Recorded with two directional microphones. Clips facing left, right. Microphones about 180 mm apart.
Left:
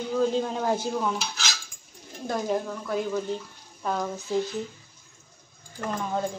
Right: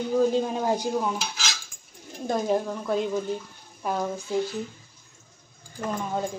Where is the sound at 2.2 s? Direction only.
25° right (ahead or behind).